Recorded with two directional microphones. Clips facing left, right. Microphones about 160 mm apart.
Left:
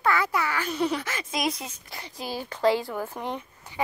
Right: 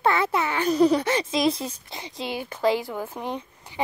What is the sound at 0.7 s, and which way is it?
A woman's voice, 35° right (ahead or behind).